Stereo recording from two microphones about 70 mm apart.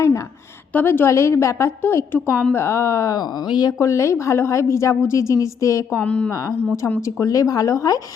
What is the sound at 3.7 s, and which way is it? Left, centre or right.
A woman's voice, left.